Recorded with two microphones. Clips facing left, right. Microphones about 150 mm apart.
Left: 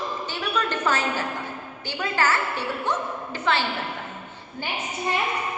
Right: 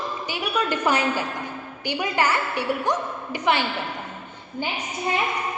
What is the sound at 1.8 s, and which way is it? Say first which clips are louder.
A woman's voice: right 2 dB; 15° right (ahead or behind).